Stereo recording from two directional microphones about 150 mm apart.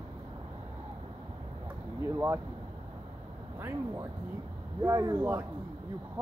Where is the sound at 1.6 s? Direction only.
15° right (ahead or behind).